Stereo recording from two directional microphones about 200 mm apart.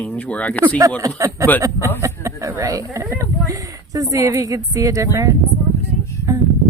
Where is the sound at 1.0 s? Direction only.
15° right (ahead or behind).